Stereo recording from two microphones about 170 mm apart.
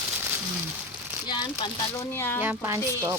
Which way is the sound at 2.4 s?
15° right (ahead or behind).